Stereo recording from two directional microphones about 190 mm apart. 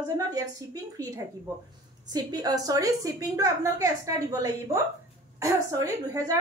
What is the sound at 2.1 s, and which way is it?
A woman's voice, 20° right (ahead or behind).